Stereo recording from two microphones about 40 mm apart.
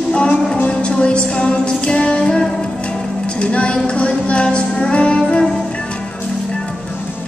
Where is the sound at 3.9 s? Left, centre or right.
Left.